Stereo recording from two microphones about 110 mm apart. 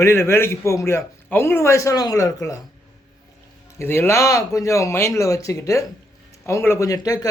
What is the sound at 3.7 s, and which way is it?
A man's voice, 20° left (ahead or behind).